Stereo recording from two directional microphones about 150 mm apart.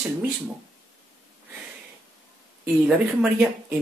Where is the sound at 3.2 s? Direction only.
5° right (ahead or behind).